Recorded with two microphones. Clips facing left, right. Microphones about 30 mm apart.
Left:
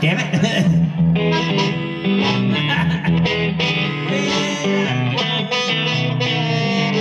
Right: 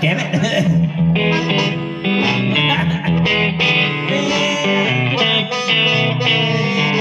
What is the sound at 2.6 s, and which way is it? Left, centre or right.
Music, right.